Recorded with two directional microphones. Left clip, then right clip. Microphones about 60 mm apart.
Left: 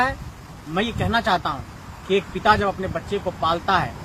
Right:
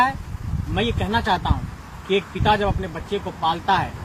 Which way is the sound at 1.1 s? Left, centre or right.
Left.